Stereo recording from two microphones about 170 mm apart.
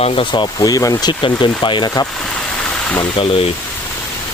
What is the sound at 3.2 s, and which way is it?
Speech, 35° left (ahead or behind).